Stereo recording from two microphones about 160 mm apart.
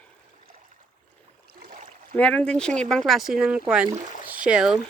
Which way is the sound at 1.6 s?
60° right (ahead or behind).